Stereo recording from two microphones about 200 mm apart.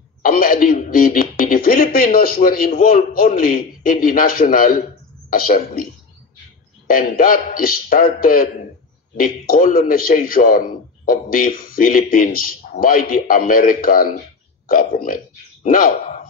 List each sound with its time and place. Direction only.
0.2 s speech: 45° left (ahead or behind)
6.9 s speech: 45° left (ahead or behind)